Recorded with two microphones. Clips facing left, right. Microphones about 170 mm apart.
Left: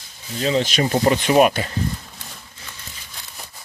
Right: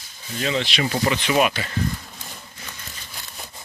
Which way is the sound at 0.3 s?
30° left (ahead or behind).